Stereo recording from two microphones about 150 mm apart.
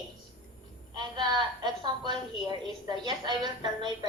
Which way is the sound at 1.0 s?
30° right (ahead or behind).